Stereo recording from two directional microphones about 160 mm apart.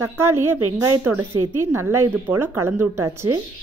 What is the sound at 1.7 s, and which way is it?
Speech, 15° right (ahead or behind).